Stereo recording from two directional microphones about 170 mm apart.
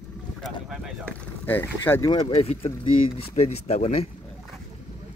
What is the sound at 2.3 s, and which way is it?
Speech, 35° left (ahead or behind).